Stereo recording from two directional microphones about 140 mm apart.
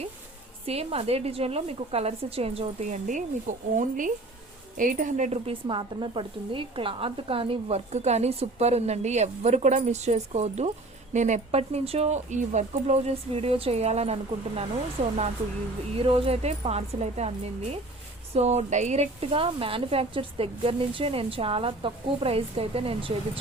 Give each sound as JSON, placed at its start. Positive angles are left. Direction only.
{"t": 0.6, "sound": "speech", "side_deg": -45}
{"t": 3.1, "sound": "speech", "side_deg": -60}
{"t": 5.6, "sound": "speech", "side_deg": -35}